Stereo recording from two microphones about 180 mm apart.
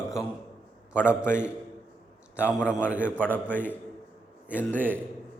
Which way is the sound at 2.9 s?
5° right (ahead or behind).